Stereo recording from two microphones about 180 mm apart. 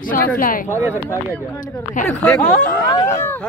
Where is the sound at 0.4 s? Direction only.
50° left (ahead or behind).